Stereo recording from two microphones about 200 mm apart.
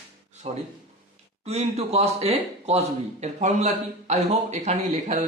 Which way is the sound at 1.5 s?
30° right (ahead or behind).